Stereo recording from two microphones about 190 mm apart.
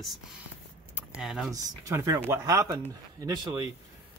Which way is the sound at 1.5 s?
20° right (ahead or behind).